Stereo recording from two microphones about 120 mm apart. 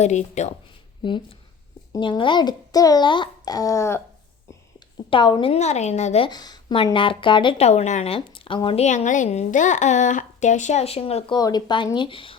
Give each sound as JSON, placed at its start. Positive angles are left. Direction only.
{"t": 0.0, "sound": "speech", "side_deg": 75}
{"t": 1.0, "sound": "a child's voice", "side_deg": 40}
{"t": 5.1, "sound": "a child's voice", "side_deg": 40}
{"t": 5.5, "sound": "speech", "side_deg": 70}
{"t": 6.2, "sound": "speech", "side_deg": 35}
{"t": 6.9, "sound": "speech", "side_deg": 45}
{"t": 7.6, "sound": "a woman's voice", "side_deg": 65}
{"t": 8.8, "sound": "a woman's voice", "side_deg": 80}
{"t": 11.3, "sound": "a child's voice", "side_deg": 35}